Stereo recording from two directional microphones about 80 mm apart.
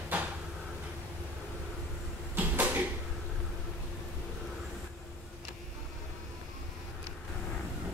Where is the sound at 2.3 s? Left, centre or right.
Right.